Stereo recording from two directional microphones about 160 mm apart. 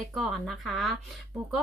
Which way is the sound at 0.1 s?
Centre (ahead or behind).